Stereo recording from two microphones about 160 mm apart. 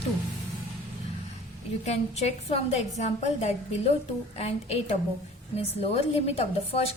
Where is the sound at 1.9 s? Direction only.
40° left (ahead or behind).